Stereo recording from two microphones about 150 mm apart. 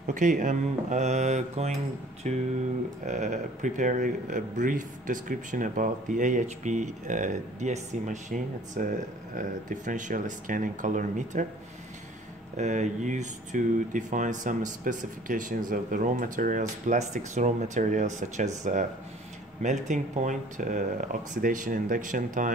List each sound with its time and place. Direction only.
0.0 s speech: 60° right (ahead or behind)
12.5 s speech: 50° right (ahead or behind)